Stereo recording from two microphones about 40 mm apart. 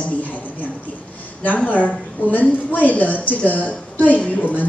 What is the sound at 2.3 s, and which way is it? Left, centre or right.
A woman's voice, left.